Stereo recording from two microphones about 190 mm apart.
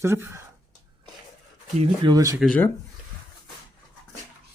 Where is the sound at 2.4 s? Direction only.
5° left (ahead or behind).